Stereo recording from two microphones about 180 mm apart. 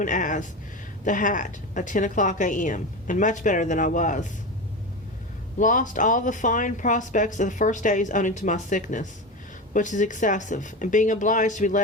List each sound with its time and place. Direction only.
0.0 s speech: 45° left (ahead or behind)
5.5 s speech: 45° left (ahead or behind)